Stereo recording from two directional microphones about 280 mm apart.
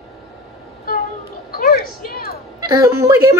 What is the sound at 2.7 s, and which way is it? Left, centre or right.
Speech, centre.